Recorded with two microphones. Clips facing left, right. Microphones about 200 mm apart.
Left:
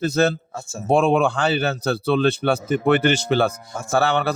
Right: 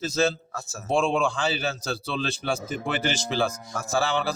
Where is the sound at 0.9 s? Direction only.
60° left (ahead or behind).